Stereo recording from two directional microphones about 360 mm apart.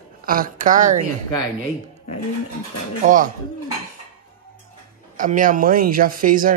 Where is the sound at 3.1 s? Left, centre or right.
Right.